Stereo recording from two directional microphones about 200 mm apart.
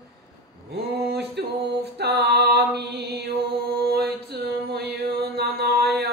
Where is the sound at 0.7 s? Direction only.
55° right (ahead or behind).